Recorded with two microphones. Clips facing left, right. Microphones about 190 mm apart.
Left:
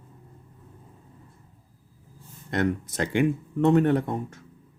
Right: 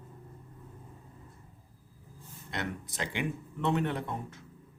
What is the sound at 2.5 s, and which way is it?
Speech, 45° left (ahead or behind).